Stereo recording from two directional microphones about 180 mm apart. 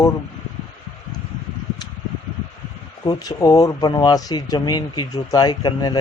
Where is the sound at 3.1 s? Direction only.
20° left (ahead or behind).